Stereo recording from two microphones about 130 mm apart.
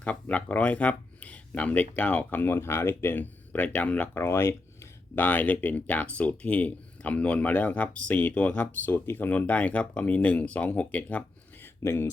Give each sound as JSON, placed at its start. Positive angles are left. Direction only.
{"t": 0.0, "sound": "speech", "side_deg": 10}
{"t": 11.8, "sound": "speech", "side_deg": 20}